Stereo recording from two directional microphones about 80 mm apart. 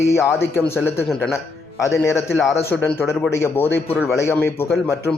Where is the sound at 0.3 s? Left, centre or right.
Left.